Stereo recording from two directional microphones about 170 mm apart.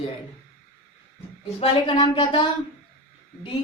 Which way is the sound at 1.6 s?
30° left (ahead or behind).